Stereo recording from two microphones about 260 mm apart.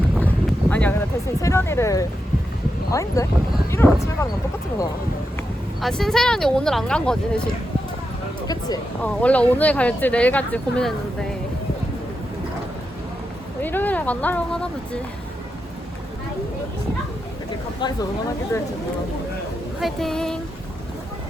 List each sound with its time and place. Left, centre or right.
0.7 s speech: centre
5.8 s speech: centre
8.4 s speech: centre
13.6 s speech: centre
19.8 s speech: centre